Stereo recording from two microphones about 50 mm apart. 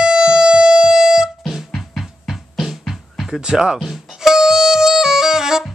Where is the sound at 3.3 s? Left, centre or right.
Centre.